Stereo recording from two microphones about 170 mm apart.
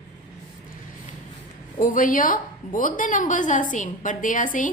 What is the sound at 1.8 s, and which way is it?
A woman's voice, 50° left (ahead or behind).